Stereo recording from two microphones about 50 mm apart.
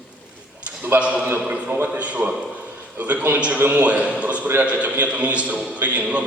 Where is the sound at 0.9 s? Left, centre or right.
Right.